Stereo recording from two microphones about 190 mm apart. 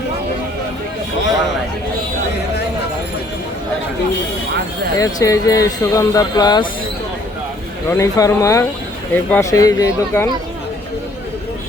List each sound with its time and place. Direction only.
4.9 s speech: 15° left (ahead or behind)
7.9 s speech: 15° left (ahead or behind)